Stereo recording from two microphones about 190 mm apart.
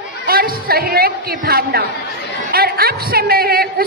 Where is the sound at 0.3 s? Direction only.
50° right (ahead or behind).